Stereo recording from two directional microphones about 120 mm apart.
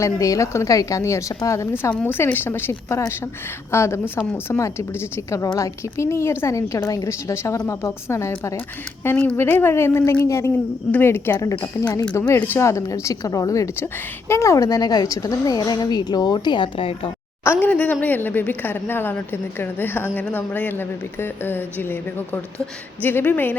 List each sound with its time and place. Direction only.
0.0 s a woman's voice: 25° left (ahead or behind); by 17.1 s 50° left (ahead or behind)
17.4 s a sound: 15° left (ahead or behind)
18.0 s a woman's voice: 15° left (ahead or behind)